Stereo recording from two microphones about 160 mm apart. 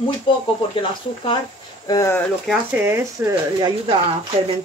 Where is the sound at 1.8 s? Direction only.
20° left (ahead or behind).